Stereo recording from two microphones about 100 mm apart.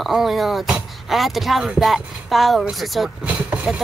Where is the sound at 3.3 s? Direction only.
10° right (ahead or behind).